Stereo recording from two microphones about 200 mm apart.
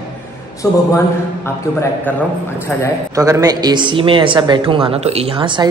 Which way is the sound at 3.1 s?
15° right (ahead or behind).